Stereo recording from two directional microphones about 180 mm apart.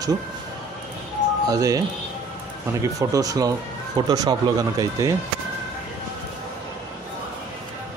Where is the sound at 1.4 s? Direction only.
20° right (ahead or behind).